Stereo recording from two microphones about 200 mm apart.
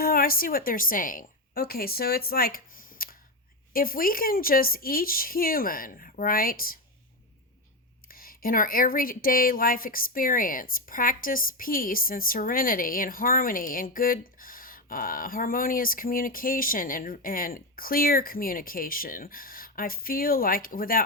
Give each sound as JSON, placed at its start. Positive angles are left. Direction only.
{"t": 0.0, "sound": "a woman's voice", "side_deg": 45}
{"t": 8.0, "sound": "speech", "side_deg": 45}